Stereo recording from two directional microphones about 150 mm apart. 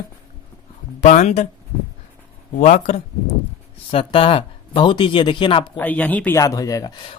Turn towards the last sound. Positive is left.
turn(degrees=25)  # may be behind; listen again after turning